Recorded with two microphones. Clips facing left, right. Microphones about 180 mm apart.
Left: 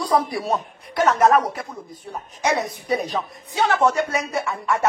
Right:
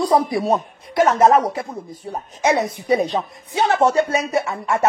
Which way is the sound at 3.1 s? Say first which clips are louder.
Right 3 dB; 25° right (ahead or behind).